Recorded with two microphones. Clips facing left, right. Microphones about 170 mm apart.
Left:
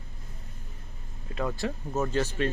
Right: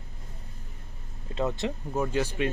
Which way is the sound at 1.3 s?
20° right (ahead or behind).